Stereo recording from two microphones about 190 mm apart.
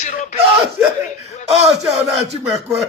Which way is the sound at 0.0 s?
40° left (ahead or behind).